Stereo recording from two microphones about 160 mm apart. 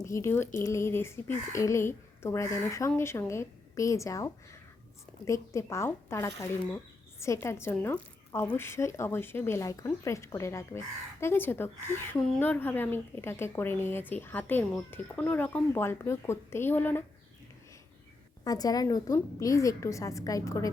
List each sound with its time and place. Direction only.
0.0 s a woman's voice: 20° left (ahead or behind)
18.4 s a woman's voice: 25° left (ahead or behind)